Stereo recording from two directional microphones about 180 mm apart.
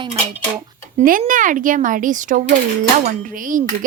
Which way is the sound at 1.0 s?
50° right (ahead or behind).